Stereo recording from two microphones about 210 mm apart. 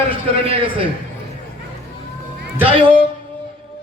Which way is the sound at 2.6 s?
25° right (ahead or behind).